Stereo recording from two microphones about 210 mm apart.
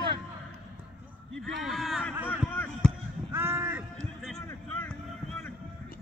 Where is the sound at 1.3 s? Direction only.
Centre (ahead or behind).